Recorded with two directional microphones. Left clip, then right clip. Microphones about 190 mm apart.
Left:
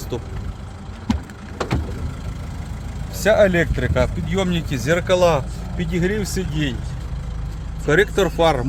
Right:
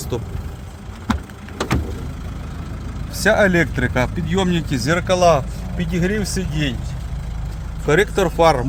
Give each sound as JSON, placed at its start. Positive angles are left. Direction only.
{"t": 0.1, "sound": "speech", "side_deg": -20}
{"t": 3.2, "sound": "speech", "side_deg": -15}
{"t": 7.9, "sound": "speech", "side_deg": -10}